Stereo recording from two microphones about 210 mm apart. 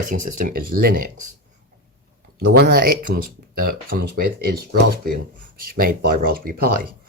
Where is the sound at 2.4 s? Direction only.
50° right (ahead or behind).